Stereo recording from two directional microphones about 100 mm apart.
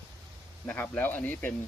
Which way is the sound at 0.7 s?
15° left (ahead or behind).